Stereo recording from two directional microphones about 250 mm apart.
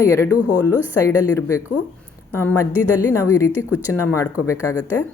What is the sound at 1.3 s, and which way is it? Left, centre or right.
Speech, centre.